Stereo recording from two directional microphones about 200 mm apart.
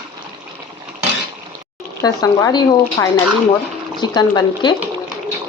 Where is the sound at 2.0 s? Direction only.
20° left (ahead or behind).